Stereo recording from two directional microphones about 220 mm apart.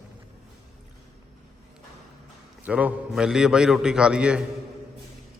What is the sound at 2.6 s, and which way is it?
A man's voice, 5° right (ahead or behind).